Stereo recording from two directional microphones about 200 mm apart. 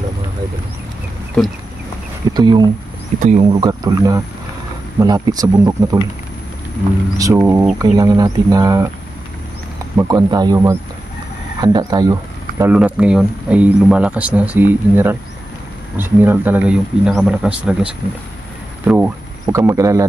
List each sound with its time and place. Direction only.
2.3 s speech: 20° right (ahead or behind)
3.2 s speech: 35° right (ahead or behind)
3.6 s speech: 20° right (ahead or behind)
7.2 s speech: 15° right (ahead or behind)
9.9 s speech: 15° right (ahead or behind)
12.7 s speech: 5° right (ahead or behind)